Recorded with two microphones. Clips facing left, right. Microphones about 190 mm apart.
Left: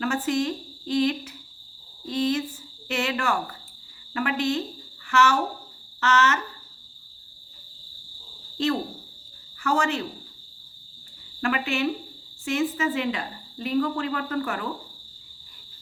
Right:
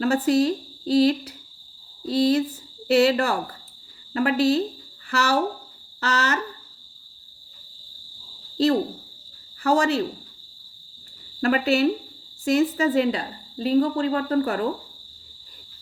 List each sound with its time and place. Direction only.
0.0 s speech: 35° right (ahead or behind)
8.5 s owl: 35° right (ahead or behind)
9.6 s speech: 35° right (ahead or behind)
11.3 s speech: 35° right (ahead or behind)